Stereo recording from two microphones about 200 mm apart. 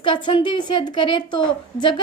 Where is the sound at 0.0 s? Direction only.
25° left (ahead or behind).